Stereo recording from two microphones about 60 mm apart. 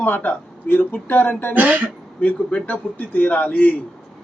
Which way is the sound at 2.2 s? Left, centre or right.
Left.